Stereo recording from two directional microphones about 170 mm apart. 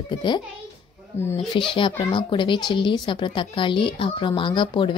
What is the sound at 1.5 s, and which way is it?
Speech, 30° left (ahead or behind).